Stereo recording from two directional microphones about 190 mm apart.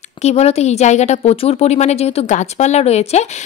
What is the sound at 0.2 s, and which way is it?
Speech, 35° left (ahead or behind).